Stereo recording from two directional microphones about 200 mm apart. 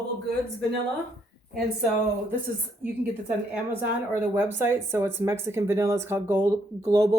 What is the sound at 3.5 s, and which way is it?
Speech, 10° right (ahead or behind).